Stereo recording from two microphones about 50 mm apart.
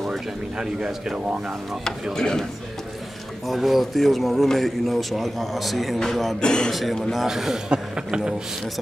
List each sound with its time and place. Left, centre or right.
0.6 s speech: centre
2.1 s a man's voice: centre
3.4 s speech: centre
6.4 s a man's voice: centre
6.7 s speech: centre
7.2 s speech: centre